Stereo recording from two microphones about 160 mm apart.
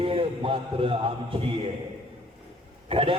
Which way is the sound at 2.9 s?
35° right (ahead or behind).